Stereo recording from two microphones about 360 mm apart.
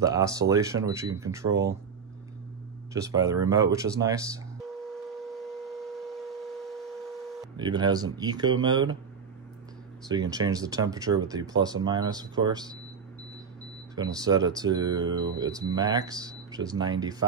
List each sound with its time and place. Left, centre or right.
0.0 s speech: centre
2.9 s music: centre
7.5 s speech: centre
10.0 s speech: centre
13.9 s speech: centre